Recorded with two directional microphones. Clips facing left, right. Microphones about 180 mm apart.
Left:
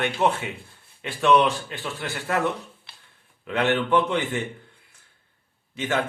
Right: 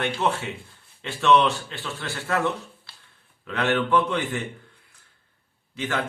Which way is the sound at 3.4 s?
20° left (ahead or behind).